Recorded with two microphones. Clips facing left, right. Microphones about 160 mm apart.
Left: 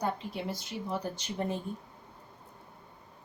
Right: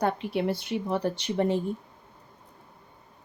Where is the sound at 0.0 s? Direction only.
70° right (ahead or behind).